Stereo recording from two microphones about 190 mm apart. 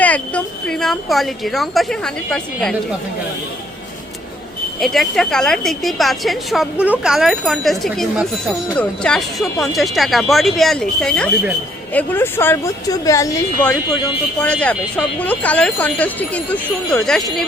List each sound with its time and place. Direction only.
0.0 s speech: 5° left (ahead or behind)
4.8 s speech: centre (ahead or behind)